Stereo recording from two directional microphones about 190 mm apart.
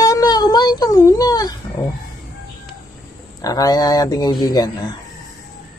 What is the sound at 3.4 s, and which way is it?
Speech, 20° left (ahead or behind).